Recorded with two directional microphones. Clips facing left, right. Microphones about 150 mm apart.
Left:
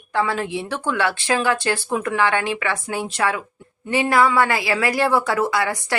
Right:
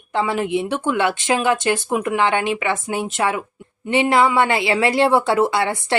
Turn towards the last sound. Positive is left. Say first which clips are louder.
# right 3 dB
turn(degrees=-25)  # may be behind; listen again after turning